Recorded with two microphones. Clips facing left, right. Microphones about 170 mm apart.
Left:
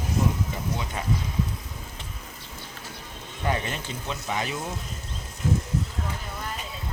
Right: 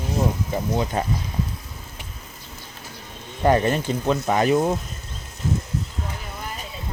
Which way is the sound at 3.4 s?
45° right (ahead or behind).